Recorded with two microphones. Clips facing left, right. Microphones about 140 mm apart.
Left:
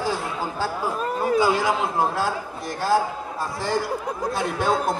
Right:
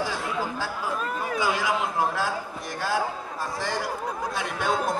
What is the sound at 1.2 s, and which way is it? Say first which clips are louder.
Speech: left 8 dB; 30° left (ahead or behind).